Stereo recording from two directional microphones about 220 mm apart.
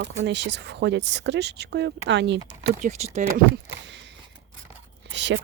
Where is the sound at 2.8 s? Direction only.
30° right (ahead or behind).